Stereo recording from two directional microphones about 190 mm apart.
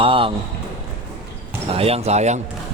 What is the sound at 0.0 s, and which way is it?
Speech, 25° right (ahead or behind).